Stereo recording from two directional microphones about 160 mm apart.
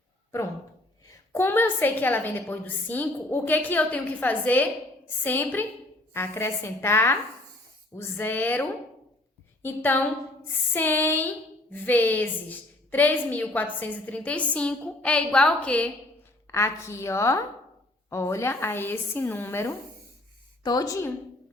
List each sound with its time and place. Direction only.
1.1 s a woman's voice: 15° left (ahead or behind)
9.6 s a woman's voice: 10° left (ahead or behind)